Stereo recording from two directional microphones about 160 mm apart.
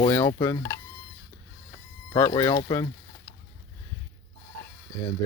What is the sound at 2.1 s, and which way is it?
Speech, 25° left (ahead or behind).